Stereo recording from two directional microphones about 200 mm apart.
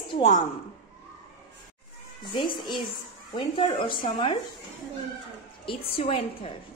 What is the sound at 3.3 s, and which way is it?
A woman's voice, 25° left (ahead or behind).